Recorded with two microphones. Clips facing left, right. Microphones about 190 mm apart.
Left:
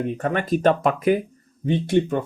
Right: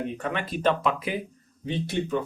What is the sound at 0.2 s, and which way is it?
Speech, 45° left (ahead or behind).